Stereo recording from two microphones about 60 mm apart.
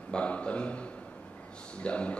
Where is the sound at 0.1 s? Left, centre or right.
Centre.